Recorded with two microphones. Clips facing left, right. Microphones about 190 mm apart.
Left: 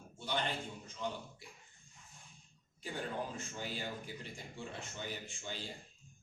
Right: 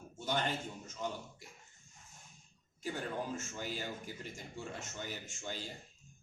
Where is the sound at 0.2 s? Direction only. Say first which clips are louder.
Right 2 dB; 45° right (ahead or behind).